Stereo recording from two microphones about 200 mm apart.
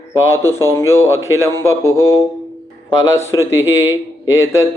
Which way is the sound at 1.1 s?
15° right (ahead or behind).